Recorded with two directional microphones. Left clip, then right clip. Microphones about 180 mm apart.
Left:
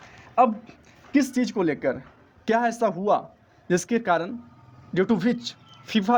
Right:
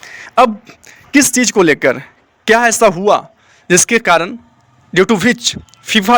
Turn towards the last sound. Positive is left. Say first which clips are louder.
# right 13 dB
turn(degrees=-20)  # may be behind; listen again after turning